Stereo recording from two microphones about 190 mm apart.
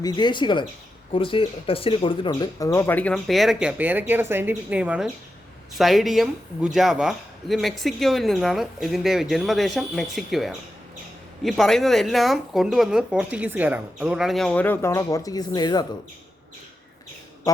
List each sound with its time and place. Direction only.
0.0 s speech: 25° left (ahead or behind)